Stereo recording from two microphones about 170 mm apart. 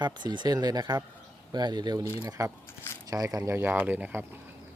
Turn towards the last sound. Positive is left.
turn(degrees=-10)  # may be behind; listen again after turning